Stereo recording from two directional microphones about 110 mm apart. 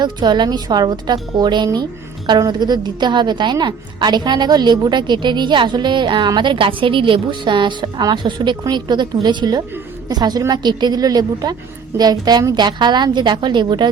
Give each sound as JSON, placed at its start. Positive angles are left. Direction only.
{"t": 0.0, "sound": "a woman's voice", "side_deg": -40}